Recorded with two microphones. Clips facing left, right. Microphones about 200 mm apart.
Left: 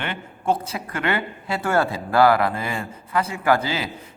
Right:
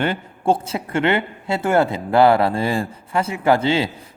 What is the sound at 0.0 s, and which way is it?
Speech, 35° right (ahead or behind).